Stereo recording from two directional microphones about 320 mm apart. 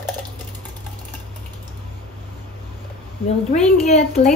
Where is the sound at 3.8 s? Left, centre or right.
Left.